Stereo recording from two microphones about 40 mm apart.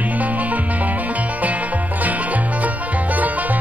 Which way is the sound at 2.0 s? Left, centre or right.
Right.